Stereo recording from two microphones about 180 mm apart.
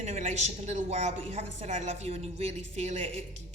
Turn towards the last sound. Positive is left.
turn(degrees=-35)  # may be behind; listen again after turning